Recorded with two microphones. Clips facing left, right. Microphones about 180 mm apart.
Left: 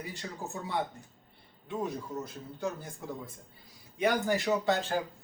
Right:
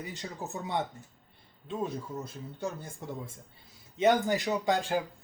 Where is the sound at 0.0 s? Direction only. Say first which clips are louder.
Right 1 dB; 20° right (ahead or behind).